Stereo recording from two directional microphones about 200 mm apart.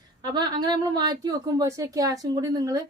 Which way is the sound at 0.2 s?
20° right (ahead or behind).